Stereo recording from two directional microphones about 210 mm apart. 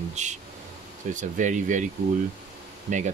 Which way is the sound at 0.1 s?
35° right (ahead or behind).